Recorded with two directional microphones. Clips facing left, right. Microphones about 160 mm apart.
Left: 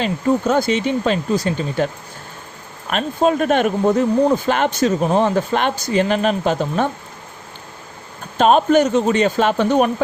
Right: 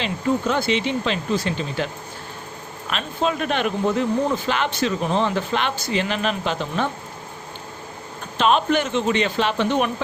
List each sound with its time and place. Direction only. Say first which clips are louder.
0.0 s a man's voice: left 4 dB; 45° left (ahead or behind)
2.9 s a man's voice: left 7 dB; 45° left (ahead or behind)
8.4 s a man's voice: left 6 dB; 45° left (ahead or behind)